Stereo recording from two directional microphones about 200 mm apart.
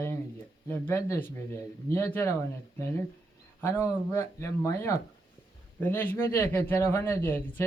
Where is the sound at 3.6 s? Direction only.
10° left (ahead or behind).